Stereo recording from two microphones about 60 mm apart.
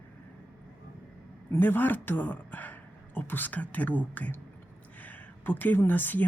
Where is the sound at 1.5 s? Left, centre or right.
Left.